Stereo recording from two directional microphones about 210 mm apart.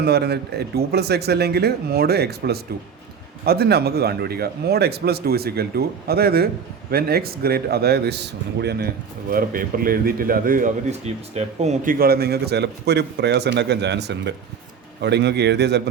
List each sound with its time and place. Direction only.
0.0 s a man's voice: 50° right (ahead or behind)